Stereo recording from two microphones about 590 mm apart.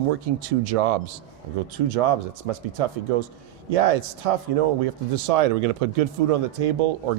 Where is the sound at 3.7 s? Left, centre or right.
Right.